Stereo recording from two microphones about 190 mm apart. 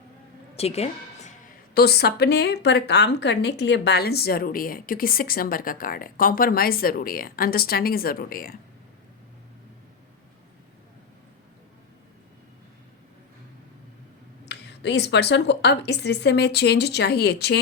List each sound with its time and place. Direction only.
0.5 s music: 35° left (ahead or behind)
1.7 s speech: 55° left (ahead or behind)
14.4 s speech: 65° left (ahead or behind)